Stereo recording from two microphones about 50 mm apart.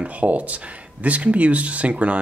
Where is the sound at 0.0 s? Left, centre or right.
Right.